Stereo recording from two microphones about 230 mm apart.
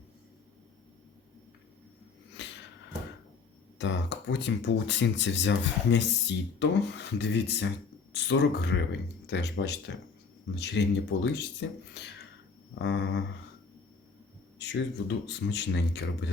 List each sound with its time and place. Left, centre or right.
2.4 s a sound: left
3.8 s speech: left
14.6 s speech: left